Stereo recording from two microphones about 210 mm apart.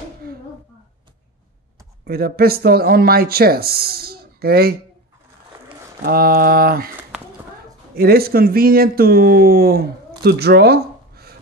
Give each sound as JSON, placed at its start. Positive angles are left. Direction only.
{"t": 2.0, "sound": "speech", "side_deg": -45}
{"t": 6.0, "sound": "speech", "side_deg": -45}
{"t": 7.9, "sound": "speech", "side_deg": -45}
{"t": 10.2, "sound": "a sound", "side_deg": -50}